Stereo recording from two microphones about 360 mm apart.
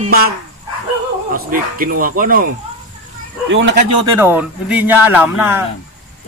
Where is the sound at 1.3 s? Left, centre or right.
Right.